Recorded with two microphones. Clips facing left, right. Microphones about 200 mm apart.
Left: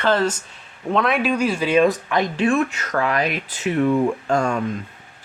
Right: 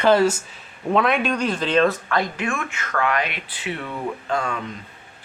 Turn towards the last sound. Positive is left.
turn(degrees=45)  # may be behind; listen again after turning